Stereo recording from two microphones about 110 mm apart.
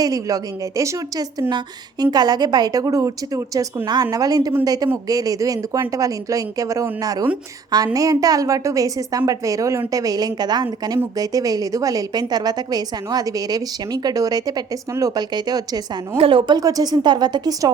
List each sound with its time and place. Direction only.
0.0 s a woman's voice: 30° right (ahead or behind)
16.1 s a woman's voice: 55° right (ahead or behind)
16.6 s a woman's voice: 35° right (ahead or behind)